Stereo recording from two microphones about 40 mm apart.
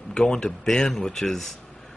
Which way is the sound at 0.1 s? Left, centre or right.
Centre.